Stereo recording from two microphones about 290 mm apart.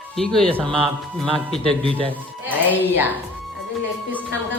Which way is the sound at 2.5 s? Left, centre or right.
Centre.